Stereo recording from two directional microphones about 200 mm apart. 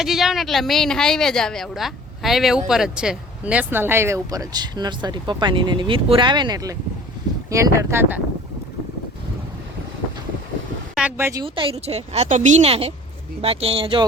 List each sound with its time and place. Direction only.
0.0 s a woman's voice: centre (ahead or behind)
10.9 s speech: 10° right (ahead or behind)
11.4 s a woman's voice: 25° right (ahead or behind)